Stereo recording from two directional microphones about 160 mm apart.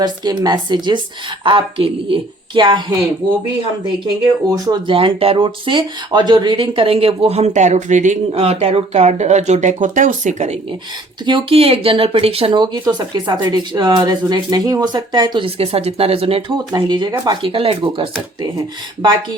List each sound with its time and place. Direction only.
0.0 s speech: 25° right (ahead or behind)
4.5 s speech: 25° right (ahead or behind); by 10.6 s 45° right (ahead or behind)
11.3 s speech: 35° right (ahead or behind)